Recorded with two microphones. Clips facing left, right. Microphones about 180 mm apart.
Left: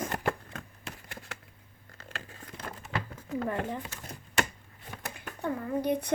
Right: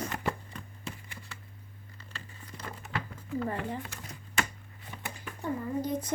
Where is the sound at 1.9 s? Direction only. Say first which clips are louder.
Left 5 dB; 90° left.